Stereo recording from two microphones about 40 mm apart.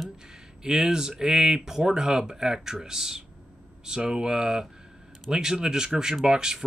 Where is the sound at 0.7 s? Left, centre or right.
Centre.